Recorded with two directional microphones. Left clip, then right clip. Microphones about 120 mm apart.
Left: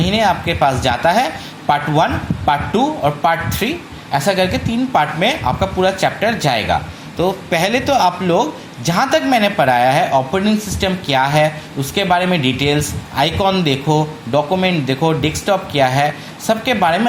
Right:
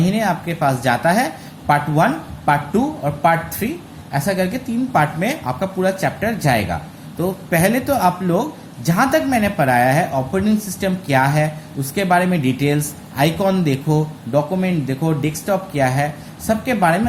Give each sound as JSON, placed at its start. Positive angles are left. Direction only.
{"t": 0.0, "sound": "a man's voice", "side_deg": 20}